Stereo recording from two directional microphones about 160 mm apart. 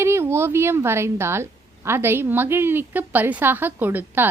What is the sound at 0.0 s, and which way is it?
Speech, 15° right (ahead or behind).